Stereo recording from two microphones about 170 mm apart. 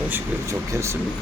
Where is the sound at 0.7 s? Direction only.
15° right (ahead or behind).